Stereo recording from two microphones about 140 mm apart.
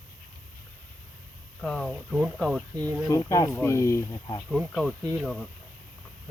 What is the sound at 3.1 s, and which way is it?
Speech, 25° left (ahead or behind).